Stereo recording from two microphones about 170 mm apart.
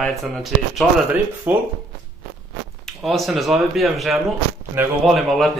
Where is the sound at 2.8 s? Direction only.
Centre (ahead or behind).